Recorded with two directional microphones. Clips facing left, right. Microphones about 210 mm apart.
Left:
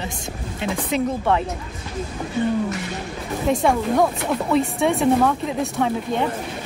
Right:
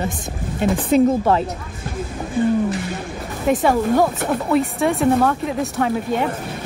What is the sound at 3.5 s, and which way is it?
Speech, 5° right (ahead or behind).